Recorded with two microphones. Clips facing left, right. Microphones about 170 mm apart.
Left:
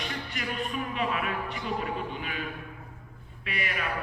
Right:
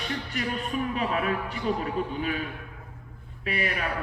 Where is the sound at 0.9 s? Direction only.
40° right (ahead or behind).